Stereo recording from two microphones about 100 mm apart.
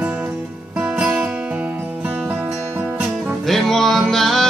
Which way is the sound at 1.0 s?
10° right (ahead or behind).